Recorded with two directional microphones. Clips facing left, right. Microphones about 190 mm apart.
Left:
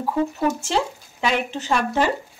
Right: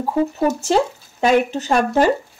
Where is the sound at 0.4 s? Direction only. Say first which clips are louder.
Right 5 dB; 40° right (ahead or behind).